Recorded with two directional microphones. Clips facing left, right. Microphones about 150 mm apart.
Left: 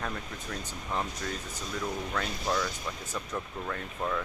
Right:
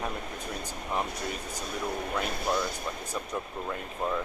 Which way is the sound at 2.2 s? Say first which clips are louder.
Right 3 dB; 55° right (ahead or behind).